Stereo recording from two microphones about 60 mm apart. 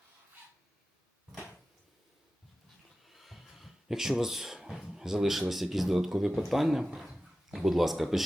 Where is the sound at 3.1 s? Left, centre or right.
Centre.